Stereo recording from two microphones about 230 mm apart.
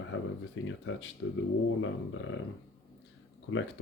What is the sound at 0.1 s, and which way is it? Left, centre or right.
Speech, left.